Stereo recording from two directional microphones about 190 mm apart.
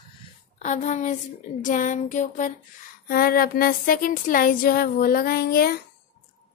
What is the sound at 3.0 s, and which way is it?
Speech, 50° left (ahead or behind).